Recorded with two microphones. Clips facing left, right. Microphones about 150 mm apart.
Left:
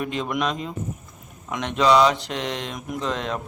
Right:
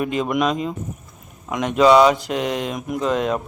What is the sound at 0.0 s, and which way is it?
Speech, 5° right (ahead or behind).